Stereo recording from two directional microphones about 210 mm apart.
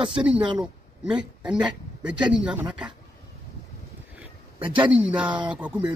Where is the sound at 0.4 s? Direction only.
20° right (ahead or behind).